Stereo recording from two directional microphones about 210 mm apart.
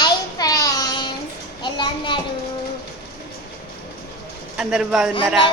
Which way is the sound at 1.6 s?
20° left (ahead or behind).